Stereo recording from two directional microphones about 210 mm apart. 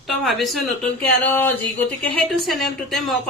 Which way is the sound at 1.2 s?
10° left (ahead or behind).